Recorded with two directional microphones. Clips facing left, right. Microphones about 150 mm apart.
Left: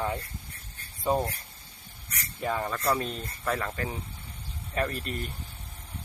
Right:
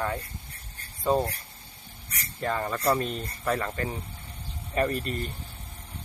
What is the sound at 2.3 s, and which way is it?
Speech, 5° left (ahead or behind).